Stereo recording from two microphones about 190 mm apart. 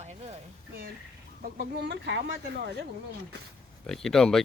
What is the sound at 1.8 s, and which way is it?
Speech, 65° right (ahead or behind).